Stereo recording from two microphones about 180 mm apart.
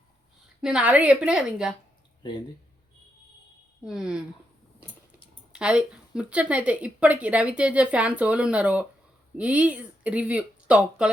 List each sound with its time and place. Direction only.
0.6 s a woman's voice: 5° right (ahead or behind)
3.8 s a woman's voice: 5° right (ahead or behind)
5.5 s a woman's voice: 5° right (ahead or behind)